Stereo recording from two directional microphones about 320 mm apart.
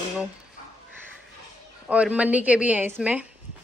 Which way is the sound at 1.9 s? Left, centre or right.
Centre.